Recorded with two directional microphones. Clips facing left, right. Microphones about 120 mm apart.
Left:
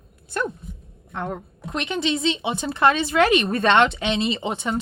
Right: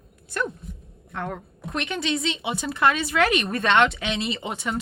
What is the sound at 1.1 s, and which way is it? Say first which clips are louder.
A woman's voice: left 2 dB; 25° left (ahead or behind).